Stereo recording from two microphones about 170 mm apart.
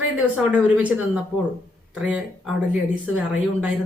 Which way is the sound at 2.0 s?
5° right (ahead or behind).